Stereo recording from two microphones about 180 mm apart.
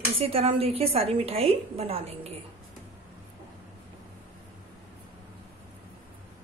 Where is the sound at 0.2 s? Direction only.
30° right (ahead or behind).